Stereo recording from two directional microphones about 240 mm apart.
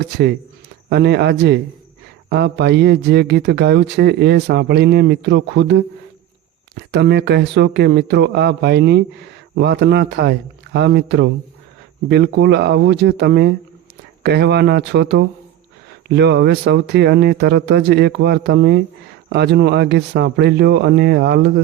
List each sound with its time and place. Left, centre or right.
0.0 s speech: right